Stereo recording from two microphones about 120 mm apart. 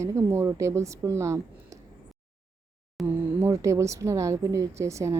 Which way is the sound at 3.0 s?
25° right (ahead or behind).